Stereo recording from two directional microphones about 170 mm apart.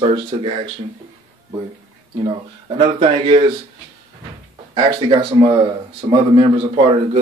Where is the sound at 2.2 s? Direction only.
30° right (ahead or behind).